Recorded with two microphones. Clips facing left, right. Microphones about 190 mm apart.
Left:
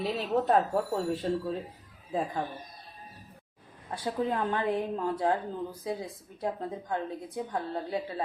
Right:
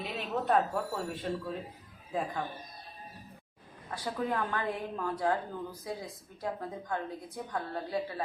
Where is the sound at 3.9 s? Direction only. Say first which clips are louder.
Left 3 dB; 25° left (ahead or behind).